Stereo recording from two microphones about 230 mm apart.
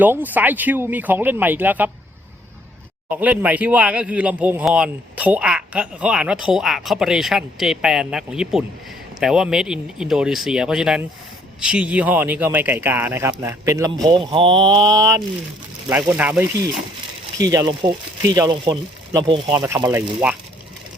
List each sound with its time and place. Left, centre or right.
0.0 s speech: centre
3.1 s speech: centre
17.5 s speech: centre